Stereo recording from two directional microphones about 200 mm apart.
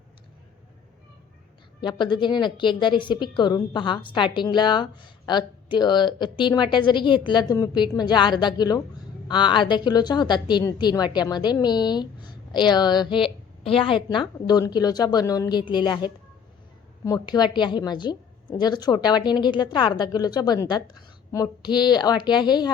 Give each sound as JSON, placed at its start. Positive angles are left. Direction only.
{"t": 1.8, "sound": "a woman's voice", "side_deg": 25}